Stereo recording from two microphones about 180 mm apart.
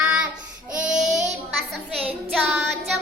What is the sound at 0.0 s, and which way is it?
Child singing, 5° right (ahead or behind).